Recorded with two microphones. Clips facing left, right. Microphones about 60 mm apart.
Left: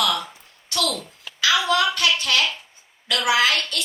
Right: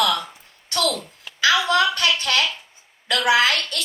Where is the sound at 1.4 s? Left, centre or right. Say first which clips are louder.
Right 2 dB; right.